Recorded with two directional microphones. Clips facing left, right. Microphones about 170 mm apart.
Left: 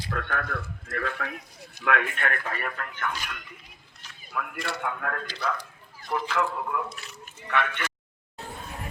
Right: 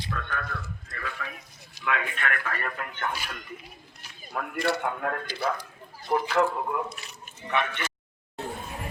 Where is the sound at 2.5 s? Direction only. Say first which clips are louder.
Even; 20° left (ahead or behind).